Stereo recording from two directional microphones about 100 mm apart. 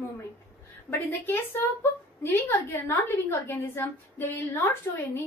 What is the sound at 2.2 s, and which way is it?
A woman's voice, 25° left (ahead or behind).